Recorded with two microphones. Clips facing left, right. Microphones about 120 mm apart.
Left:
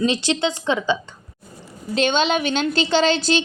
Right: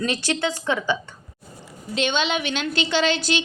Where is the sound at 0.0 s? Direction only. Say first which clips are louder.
Left 4 dB; 20° left (ahead or behind).